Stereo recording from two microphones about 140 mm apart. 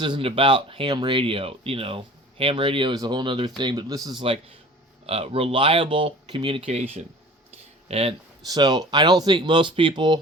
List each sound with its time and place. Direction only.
0.0 s speech: 40° right (ahead or behind)
5.0 s speech: 45° right (ahead or behind)
7.9 s speech: 45° right (ahead or behind)
8.4 s speech: 30° right (ahead or behind)